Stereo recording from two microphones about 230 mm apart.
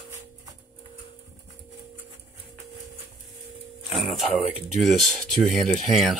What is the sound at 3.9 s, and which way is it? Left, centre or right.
Music, centre.